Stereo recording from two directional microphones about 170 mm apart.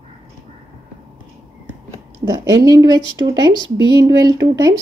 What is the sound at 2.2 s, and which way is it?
Speech, 20° right (ahead or behind).